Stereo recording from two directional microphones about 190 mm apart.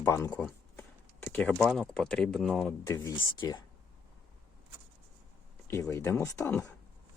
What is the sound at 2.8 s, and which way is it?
Speech, 15° left (ahead or behind).